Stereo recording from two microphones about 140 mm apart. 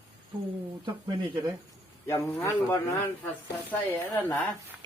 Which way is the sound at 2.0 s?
20° left (ahead or behind).